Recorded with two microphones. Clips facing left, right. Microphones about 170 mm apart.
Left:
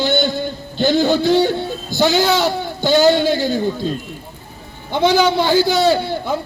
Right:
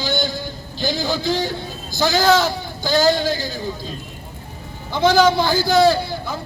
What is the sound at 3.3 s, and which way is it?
Speech, 60° left (ahead or behind).